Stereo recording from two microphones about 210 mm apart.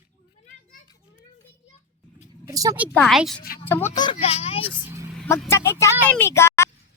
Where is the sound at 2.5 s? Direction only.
15° right (ahead or behind).